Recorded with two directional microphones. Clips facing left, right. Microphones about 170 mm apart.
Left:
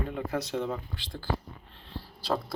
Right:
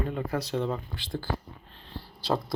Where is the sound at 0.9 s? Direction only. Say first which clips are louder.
Right 6 dB; 50° right (ahead or behind).